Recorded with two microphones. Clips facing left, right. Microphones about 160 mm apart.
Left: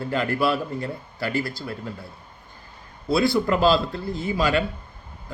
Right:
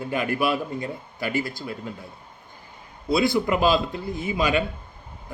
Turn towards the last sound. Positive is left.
turn(degrees=-20)  # may be behind; listen again after turning